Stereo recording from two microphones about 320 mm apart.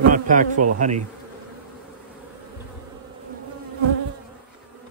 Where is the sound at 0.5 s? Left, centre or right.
Right.